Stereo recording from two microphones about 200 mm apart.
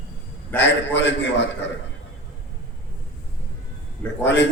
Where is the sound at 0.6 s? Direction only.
60° left (ahead or behind).